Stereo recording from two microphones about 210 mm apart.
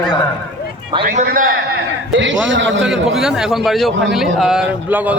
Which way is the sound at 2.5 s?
60° right (ahead or behind).